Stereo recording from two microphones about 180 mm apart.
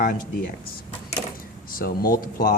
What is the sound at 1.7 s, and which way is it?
Speech, 55° left (ahead or behind).